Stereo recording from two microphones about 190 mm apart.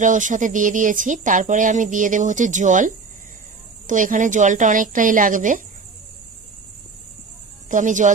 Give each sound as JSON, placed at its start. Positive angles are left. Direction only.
{"t": 0.0, "sound": "speech", "side_deg": -40}
{"t": 7.7, "sound": "speech", "side_deg": -40}